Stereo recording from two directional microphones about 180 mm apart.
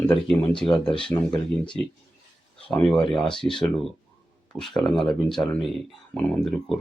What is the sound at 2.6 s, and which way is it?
Speech, 5° left (ahead or behind).